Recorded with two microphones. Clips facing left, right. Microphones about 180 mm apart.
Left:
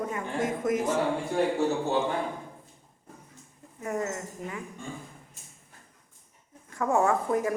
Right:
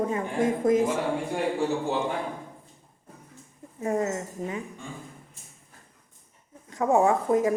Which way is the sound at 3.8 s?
20° right (ahead or behind).